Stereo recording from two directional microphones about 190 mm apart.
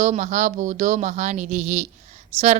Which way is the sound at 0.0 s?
40° right (ahead or behind).